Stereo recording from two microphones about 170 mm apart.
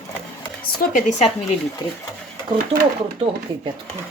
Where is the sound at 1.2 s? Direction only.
35° left (ahead or behind).